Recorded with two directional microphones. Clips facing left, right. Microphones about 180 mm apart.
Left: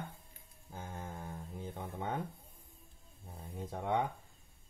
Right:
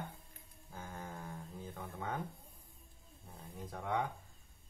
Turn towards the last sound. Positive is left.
turn(degrees=25)  # may be behind; listen again after turning